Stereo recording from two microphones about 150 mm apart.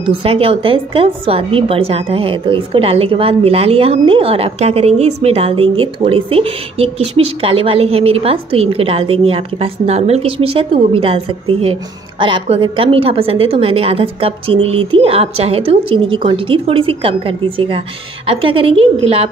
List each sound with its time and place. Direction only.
0.0 s a woman's voice: 35° right (ahead or behind)